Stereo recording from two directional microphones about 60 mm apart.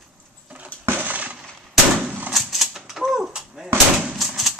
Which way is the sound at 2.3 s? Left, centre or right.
Centre.